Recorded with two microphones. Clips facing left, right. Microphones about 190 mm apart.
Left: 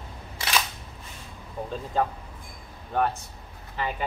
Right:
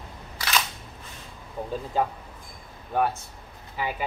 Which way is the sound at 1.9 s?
10° right (ahead or behind).